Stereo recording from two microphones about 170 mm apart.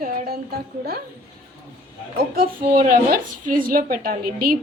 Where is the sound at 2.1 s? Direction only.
60° right (ahead or behind).